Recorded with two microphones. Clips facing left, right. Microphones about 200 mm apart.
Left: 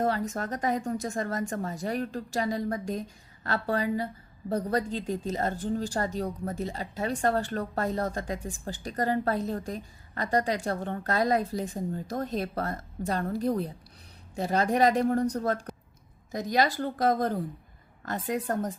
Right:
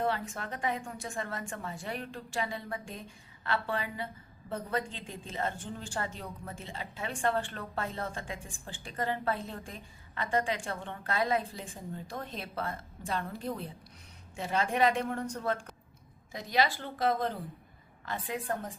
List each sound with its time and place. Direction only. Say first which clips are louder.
0.0 s a woman's voice: left 5 dB; 40° left (ahead or behind)